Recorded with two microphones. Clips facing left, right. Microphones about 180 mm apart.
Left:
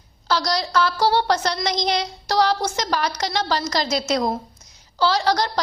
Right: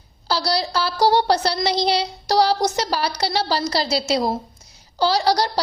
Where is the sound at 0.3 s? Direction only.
35° right (ahead or behind).